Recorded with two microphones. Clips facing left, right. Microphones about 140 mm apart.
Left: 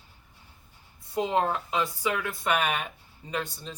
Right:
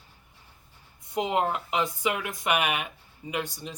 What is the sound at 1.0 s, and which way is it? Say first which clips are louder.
Speech: even; 20° right (ahead or behind).